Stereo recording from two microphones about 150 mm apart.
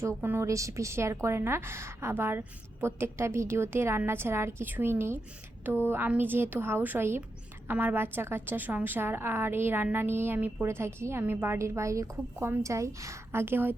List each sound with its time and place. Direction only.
0.2 s a woman's voice: 15° right (ahead or behind)